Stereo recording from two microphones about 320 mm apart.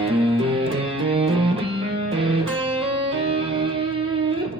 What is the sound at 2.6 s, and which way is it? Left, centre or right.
Music, centre.